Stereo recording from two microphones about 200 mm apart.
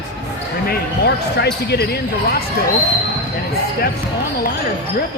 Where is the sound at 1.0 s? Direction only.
55° left (ahead or behind).